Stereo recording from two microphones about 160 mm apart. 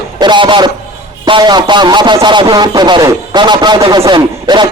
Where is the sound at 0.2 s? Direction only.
25° right (ahead or behind).